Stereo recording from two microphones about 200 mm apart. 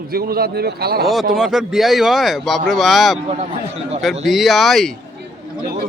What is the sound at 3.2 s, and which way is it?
Speech, 30° right (ahead or behind).